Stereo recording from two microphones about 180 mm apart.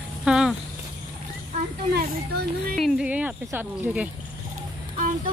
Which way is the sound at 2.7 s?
Centre (ahead or behind).